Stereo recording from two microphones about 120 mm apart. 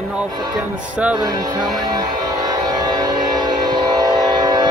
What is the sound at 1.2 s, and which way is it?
Speech, 35° right (ahead or behind).